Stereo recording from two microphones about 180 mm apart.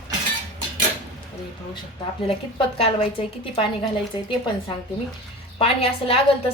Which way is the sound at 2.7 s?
35° left (ahead or behind).